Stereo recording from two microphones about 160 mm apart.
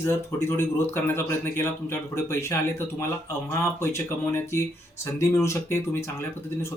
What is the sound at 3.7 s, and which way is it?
Speech, 15° left (ahead or behind).